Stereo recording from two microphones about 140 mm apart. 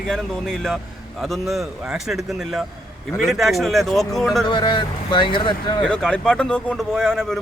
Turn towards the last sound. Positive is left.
turn(degrees=5)  # may be behind; listen again after turning